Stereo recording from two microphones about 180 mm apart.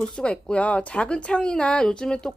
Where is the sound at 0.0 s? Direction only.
5° left (ahead or behind).